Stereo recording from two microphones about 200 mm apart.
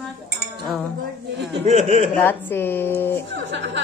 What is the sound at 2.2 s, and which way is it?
Speech, 10° left (ahead or behind).